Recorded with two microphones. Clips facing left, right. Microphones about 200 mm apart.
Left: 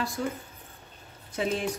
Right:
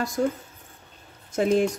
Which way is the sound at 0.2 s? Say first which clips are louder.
Right 7 dB; 40° right (ahead or behind).